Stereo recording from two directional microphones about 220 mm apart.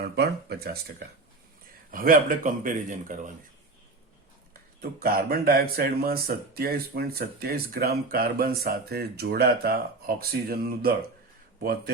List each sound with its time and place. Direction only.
0.0 s speech: 45° right (ahead or behind)
4.8 s speech: 40° right (ahead or behind)